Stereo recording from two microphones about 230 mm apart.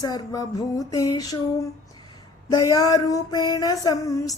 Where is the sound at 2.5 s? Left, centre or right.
Centre.